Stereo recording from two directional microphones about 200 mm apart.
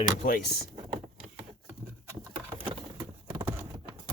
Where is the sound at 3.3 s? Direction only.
10° right (ahead or behind).